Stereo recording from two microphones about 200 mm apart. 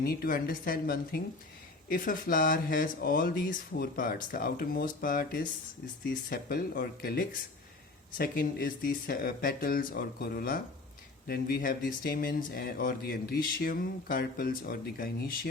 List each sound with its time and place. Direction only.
0.0 s speech: 50° left (ahead or behind)